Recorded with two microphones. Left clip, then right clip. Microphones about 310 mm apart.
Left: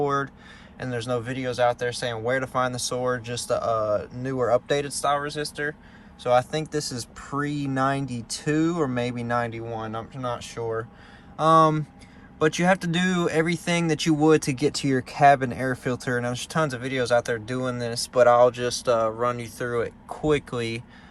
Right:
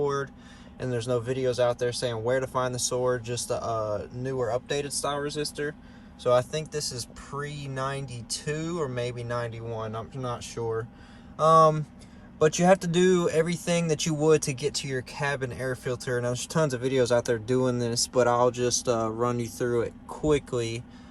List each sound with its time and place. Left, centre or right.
0.0 s a sound: centre
0.8 s speech: centre
4.9 s speech: centre
6.4 s speech: centre